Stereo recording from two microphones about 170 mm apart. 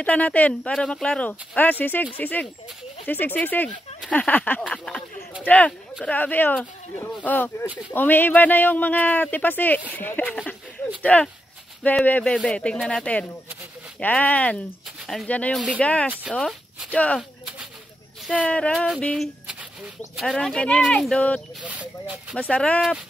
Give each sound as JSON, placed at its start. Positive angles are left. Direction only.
{"t": 0.0, "sound": "a man's voice", "side_deg": 10}
{"t": 18.4, "sound": "speech", "side_deg": 5}
{"t": 21.6, "sound": "speech", "side_deg": -10}
{"t": 22.3, "sound": "speech", "side_deg": 5}